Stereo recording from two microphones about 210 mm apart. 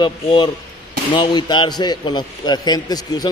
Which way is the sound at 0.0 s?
20° left (ahead or behind).